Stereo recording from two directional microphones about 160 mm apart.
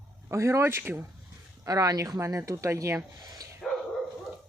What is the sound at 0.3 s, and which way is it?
Speech, 20° right (ahead or behind).